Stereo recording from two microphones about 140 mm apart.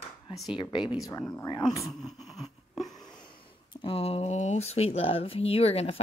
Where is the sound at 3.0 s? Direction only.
35° left (ahead or behind).